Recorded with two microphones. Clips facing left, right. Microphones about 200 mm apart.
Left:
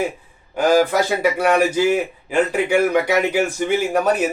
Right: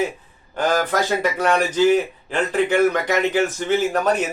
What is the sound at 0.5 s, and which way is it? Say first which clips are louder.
A man's voice: left 5 dB; 10° left (ahead or behind).